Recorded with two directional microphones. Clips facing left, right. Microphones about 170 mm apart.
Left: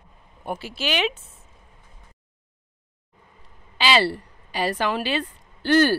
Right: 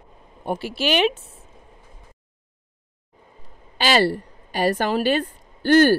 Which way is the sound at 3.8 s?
45° right (ahead or behind).